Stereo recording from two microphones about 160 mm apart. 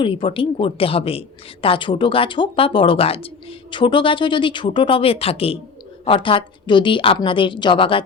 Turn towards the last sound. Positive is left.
turn(degrees=30)  # may be behind; listen again after turning